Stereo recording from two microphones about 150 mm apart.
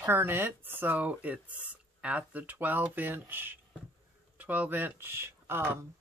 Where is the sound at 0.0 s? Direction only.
15° right (ahead or behind).